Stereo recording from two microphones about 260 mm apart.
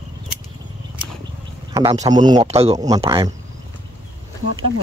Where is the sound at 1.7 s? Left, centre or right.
Centre.